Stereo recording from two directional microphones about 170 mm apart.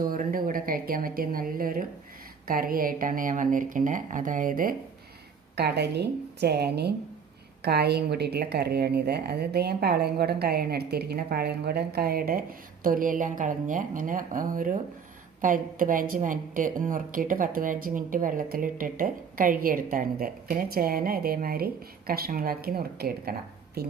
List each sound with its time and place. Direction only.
0.0 s a woman's voice: 55° right (ahead or behind)
5.5 s a woman's voice: 75° right (ahead or behind)